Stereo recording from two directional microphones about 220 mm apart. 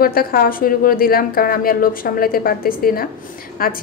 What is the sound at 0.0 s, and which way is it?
A woman's voice, 40° left (ahead or behind).